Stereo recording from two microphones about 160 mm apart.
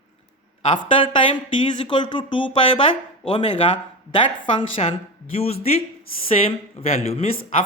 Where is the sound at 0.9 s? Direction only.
30° left (ahead or behind).